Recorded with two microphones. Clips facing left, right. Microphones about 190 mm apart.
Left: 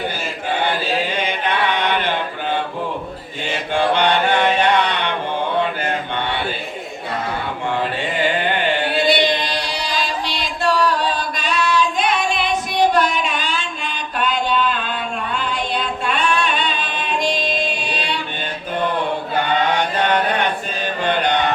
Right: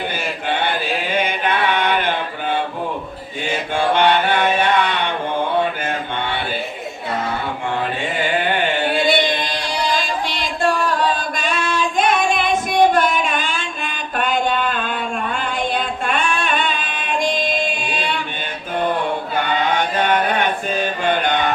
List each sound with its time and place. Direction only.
3.9 s music: 50° right (ahead or behind)
9.0 s music: 50° right (ahead or behind)
16.0 s singing: 50° right (ahead or behind)